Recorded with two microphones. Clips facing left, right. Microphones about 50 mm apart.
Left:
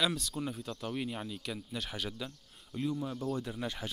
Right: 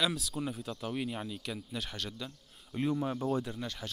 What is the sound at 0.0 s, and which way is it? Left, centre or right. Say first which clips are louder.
Speech: even; centre.